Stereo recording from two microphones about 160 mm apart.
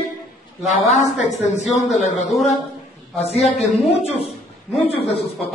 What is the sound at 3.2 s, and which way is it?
Speech, 40° left (ahead or behind).